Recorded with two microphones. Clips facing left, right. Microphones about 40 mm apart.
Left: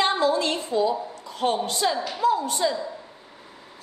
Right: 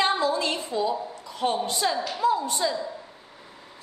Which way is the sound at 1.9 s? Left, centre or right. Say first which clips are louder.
Left 1 dB; centre.